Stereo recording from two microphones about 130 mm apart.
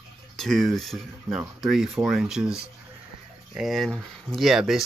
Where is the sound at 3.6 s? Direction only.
Centre (ahead or behind).